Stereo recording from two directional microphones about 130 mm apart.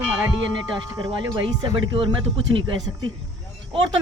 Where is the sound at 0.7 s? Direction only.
40° right (ahead or behind).